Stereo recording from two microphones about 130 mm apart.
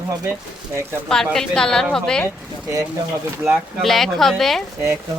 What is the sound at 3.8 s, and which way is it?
Speech, centre (ahead or behind).